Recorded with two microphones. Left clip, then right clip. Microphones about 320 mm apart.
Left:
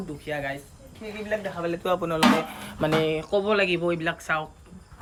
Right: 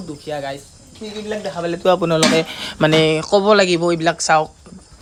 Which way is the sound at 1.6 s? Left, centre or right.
Right.